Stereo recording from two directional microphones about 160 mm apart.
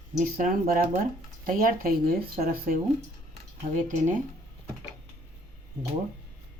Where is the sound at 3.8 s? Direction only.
50° right (ahead or behind).